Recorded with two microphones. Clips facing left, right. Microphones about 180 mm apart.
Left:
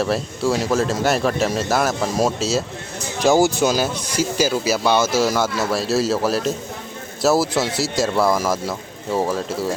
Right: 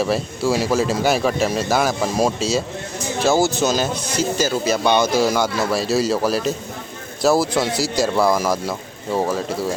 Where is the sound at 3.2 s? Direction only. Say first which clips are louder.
Left 2 dB; 15° left (ahead or behind).